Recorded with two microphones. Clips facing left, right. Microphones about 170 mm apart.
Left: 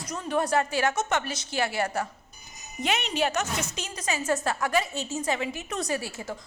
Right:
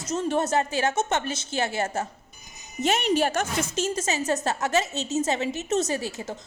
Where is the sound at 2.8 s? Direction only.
45° right (ahead or behind).